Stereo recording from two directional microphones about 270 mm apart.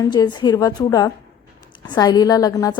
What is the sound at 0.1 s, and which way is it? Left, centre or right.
A woman's voice, centre.